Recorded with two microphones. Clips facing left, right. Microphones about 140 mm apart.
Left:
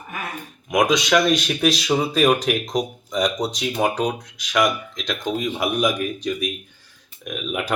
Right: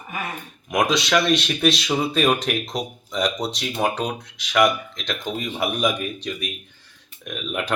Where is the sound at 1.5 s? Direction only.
10° left (ahead or behind).